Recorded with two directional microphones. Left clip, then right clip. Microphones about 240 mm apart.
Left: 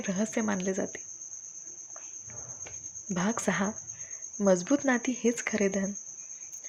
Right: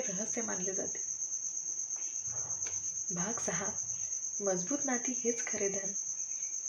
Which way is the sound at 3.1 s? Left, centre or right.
Left.